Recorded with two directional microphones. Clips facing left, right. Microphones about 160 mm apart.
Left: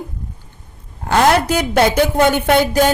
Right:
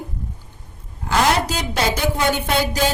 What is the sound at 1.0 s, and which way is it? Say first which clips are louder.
A woman's voice: left 5 dB; 60° left (ahead or behind).